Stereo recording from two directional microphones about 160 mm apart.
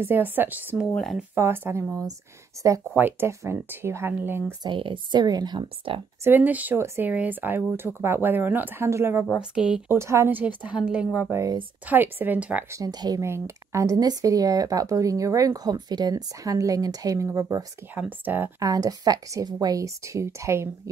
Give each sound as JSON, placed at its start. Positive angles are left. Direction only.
{"t": 0.0, "sound": "speech", "side_deg": -15}
{"t": 0.9, "sound": "a woman's voice", "side_deg": 0}
{"t": 1.3, "sound": "speech", "side_deg": -15}
{"t": 4.6, "sound": "speech", "side_deg": -30}
{"t": 6.2, "sound": "a woman's voice", "side_deg": -10}
{"t": 12.7, "sound": "speech", "side_deg": -25}
{"t": 17.9, "sound": "speech", "side_deg": -10}
{"t": 18.7, "sound": "speech", "side_deg": -25}